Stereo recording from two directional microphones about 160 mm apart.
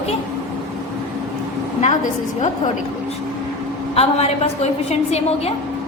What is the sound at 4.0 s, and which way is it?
A woman's voice, 40° left (ahead or behind).